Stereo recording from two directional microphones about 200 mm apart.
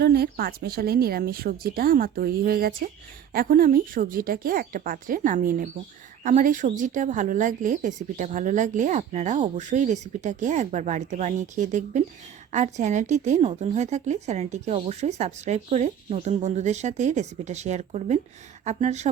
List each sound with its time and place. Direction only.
0.0 s speech: 50° right (ahead or behind); by 19.1 s 35° right (ahead or behind)